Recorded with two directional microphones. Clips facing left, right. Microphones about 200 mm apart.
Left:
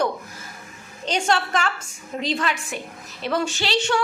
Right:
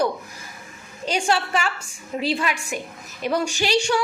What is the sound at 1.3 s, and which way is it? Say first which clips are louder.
A woman's voice: left 1 dB; 10° right (ahead or behind).